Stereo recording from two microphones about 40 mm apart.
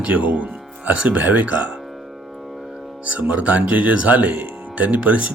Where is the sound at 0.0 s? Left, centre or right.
Right.